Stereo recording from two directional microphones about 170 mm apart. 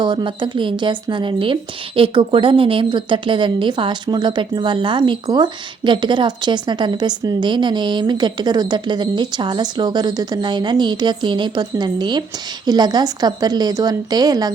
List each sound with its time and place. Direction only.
0.0 s a woman's voice: 25° right (ahead or behind)